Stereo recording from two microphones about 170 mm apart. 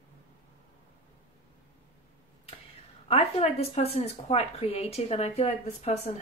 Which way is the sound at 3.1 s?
35° left (ahead or behind).